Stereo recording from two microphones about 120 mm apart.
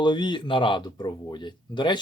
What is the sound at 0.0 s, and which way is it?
Speech, 40° left (ahead or behind).